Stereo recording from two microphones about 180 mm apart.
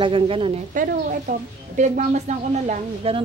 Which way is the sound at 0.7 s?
50° right (ahead or behind).